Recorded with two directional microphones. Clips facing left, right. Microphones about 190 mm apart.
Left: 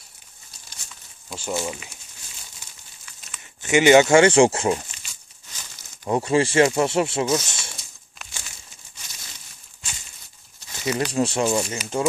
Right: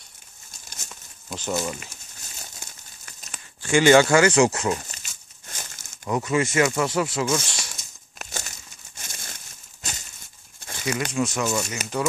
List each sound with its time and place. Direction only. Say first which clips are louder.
1.3 s speech: right 1 dB; 10° left (ahead or behind)
2.6 s crumpling: right 3 dB; 45° right (ahead or behind)
3.6 s speech: left 1 dB; 20° left (ahead or behind)
4.9 s crumpling: right 1 dB; 45° right (ahead or behind)
6.0 s speech: left 3 dB; 30° left (ahead or behind)
7.7 s crumpling: left 1 dB; 45° right (ahead or behind)
11.1 s speech: left 3 dB; 35° left (ahead or behind)
11.8 s speech: right 1 dB; 45° right (ahead or behind)